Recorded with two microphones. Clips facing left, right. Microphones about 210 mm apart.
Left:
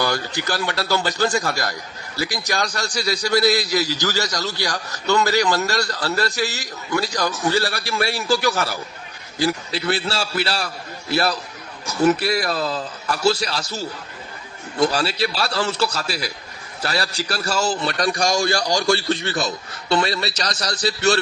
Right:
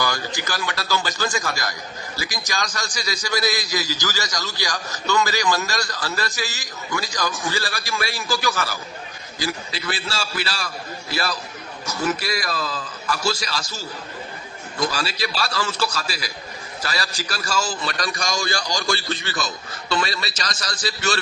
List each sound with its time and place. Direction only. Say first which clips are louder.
0.0 s a man's voice: left 3 dB; 65° left (ahead or behind)
2.1 s a man's voice: left 5 dB; 65° left (ahead or behind)